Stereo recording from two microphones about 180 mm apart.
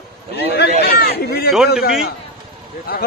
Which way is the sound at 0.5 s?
65° left (ahead or behind).